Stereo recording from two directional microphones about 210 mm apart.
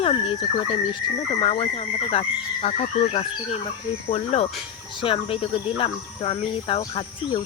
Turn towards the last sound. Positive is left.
turn(degrees=20)  # may be behind; listen again after turning